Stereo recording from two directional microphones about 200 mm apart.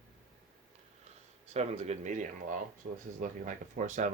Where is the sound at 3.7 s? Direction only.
35° right (ahead or behind).